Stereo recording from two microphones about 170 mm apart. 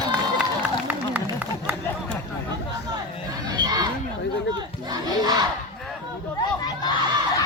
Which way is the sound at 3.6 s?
25° right (ahead or behind).